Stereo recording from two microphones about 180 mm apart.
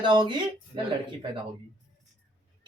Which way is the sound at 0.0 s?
25° right (ahead or behind).